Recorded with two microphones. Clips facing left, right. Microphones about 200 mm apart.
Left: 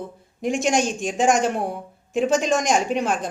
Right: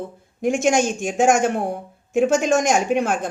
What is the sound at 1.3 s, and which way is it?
Speech, 50° right (ahead or behind).